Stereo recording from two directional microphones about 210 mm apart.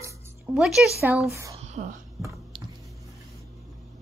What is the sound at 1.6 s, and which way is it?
Whispering, 35° right (ahead or behind).